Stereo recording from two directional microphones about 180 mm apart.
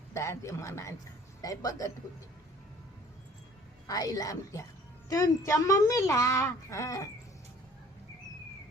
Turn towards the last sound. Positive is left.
turn(degrees=15)  # may be behind; listen again after turning